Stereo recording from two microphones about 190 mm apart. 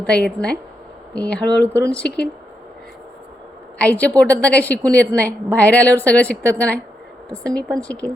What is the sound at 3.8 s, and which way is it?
A woman's voice, 10° left (ahead or behind).